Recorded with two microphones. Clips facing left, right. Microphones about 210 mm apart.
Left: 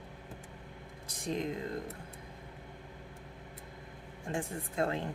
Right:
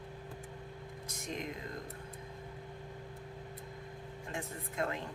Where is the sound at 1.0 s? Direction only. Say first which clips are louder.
Left 6 dB; 30° left (ahead or behind).